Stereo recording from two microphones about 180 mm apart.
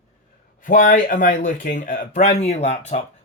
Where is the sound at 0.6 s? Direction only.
50° left (ahead or behind).